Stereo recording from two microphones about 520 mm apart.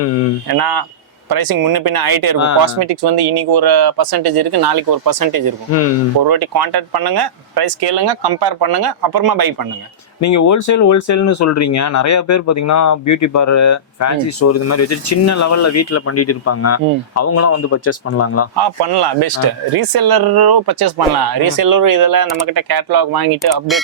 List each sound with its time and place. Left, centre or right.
0.0 s a man's voice: left
0.4 s speech: right
10.2 s a man's voice: left
18.5 s speech: right